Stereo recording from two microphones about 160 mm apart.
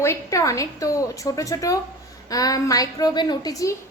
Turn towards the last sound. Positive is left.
turn(degrees=20)  # may be behind; listen again after turning